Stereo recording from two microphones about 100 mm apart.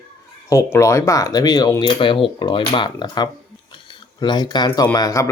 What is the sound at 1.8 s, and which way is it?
Speech, 50° left (ahead or behind).